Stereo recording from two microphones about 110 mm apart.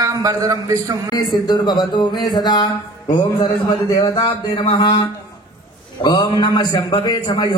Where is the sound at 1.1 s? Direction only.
40° left (ahead or behind).